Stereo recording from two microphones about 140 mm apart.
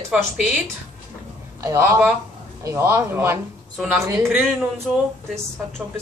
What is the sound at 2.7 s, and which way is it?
A woman's voice, 20° right (ahead or behind).